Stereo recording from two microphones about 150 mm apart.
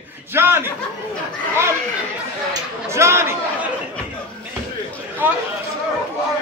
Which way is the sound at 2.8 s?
20° right (ahead or behind).